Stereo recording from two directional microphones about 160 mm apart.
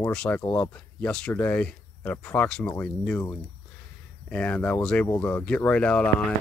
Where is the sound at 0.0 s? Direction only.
10° left (ahead or behind).